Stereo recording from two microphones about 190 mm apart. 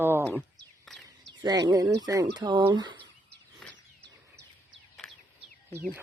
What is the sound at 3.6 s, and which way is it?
Bird, centre (ahead or behind).